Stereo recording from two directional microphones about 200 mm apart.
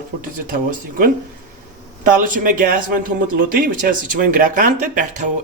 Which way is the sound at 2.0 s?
40° right (ahead or behind).